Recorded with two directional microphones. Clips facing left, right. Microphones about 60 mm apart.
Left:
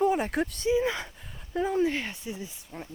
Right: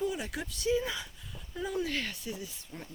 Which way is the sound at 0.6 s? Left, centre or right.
Left.